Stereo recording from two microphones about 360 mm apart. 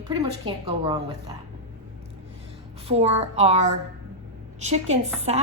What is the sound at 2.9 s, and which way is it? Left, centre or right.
Speech, centre.